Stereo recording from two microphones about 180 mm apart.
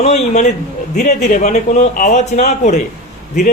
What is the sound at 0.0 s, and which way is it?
A man's voice, 35° left (ahead or behind).